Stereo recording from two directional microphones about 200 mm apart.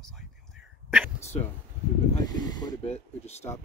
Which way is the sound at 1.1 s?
35° left (ahead or behind).